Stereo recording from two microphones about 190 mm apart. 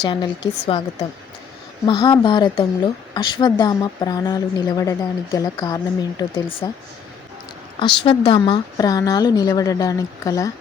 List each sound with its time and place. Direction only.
0.0 s a woman's voice: 25° left (ahead or behind)
1.9 s a woman's voice: 20° left (ahead or behind)
7.8 s a woman's voice: 25° left (ahead or behind)